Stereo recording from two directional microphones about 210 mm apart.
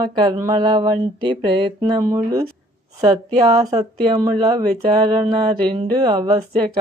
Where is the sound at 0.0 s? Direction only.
20° right (ahead or behind).